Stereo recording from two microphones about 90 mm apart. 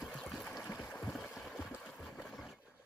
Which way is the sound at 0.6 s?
20° left (ahead or behind).